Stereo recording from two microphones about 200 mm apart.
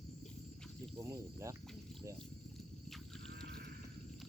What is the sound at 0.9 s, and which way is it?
Speech, 15° right (ahead or behind).